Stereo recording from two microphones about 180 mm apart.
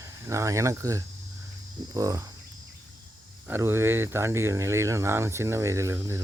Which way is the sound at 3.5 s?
15° right (ahead or behind).